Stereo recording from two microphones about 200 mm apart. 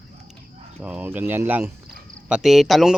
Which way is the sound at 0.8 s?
5° right (ahead or behind).